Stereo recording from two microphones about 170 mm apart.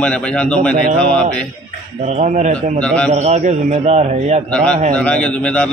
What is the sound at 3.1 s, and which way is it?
A man's voice, 45° right (ahead or behind).